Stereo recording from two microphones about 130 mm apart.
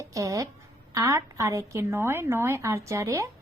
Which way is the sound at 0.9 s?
25° right (ahead or behind).